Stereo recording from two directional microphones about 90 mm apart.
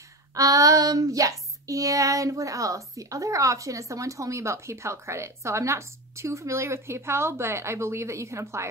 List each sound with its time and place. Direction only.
0.3 s female singing: 40° right (ahead or behind)